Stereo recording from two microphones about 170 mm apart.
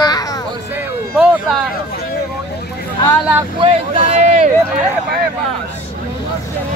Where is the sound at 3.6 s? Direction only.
35° right (ahead or behind).